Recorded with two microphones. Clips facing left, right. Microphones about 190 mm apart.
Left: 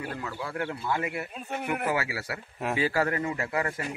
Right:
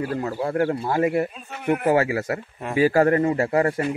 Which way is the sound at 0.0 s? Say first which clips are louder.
Right 10 dB; 35° right (ahead or behind).